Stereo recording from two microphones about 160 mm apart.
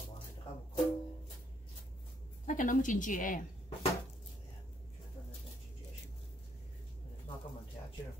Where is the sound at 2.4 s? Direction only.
55° left (ahead or behind).